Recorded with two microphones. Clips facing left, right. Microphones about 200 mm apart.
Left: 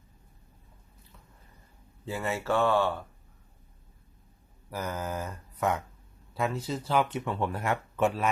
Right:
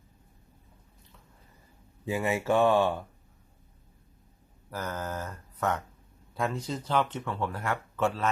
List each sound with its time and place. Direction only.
2.0 s speech: 15° right (ahead or behind)
4.7 s speech: 10° left (ahead or behind)